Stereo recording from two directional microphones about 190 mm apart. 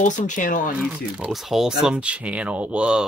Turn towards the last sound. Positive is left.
turn(degrees=-5)  # may be behind; listen again after turning